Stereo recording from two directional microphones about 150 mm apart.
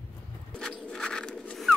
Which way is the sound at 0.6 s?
5° left (ahead or behind).